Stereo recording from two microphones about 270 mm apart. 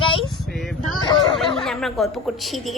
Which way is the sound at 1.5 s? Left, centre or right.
Centre.